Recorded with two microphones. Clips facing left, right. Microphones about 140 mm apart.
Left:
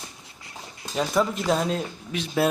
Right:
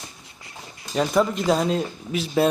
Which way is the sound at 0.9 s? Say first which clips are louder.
Right 3 dB; centre (ahead or behind).